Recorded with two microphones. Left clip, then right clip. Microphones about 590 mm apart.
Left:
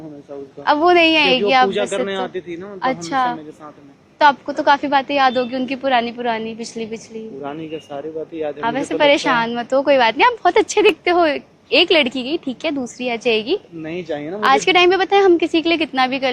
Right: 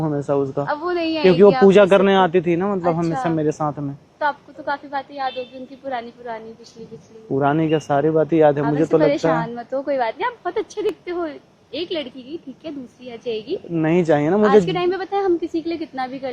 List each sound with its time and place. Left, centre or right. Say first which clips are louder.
0.6 s a woman's voice: left 9 dB; left
1.7 s a man's voice: right 8 dB; right
4.2 s a woman's voice: left 9 dB; left
7.4 s speech: right 12 dB; right
8.6 s a woman's voice: left 1 dB; left
13.8 s speech: right 8 dB; right
14.4 s a woman's voice: left 7 dB; left